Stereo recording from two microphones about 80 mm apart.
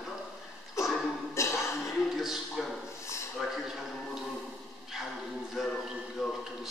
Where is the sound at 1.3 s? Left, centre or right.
Left.